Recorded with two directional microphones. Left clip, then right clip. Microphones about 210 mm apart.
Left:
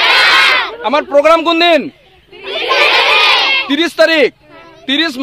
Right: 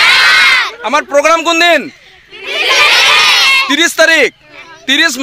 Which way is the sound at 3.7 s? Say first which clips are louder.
Right 2 dB; 20° right (ahead or behind).